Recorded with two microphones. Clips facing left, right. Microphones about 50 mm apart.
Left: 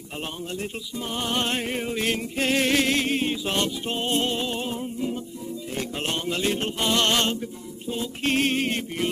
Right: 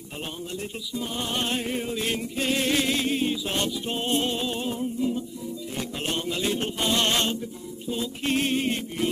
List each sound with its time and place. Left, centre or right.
0.9 s music: left